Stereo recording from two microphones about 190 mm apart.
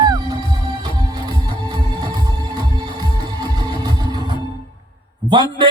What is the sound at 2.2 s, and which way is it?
Music, 20° right (ahead or behind).